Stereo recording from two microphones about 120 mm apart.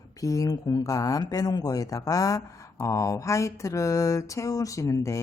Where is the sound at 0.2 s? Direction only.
30° left (ahead or behind).